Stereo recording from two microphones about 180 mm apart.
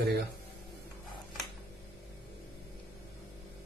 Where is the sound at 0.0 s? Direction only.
65° right (ahead or behind).